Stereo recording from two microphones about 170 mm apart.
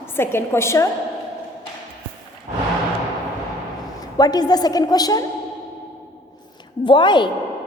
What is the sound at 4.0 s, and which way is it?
A woman's voice, 25° left (ahead or behind).